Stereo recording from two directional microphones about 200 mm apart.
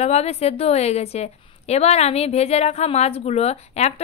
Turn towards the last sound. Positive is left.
turn(degrees=35)  # may be behind; listen again after turning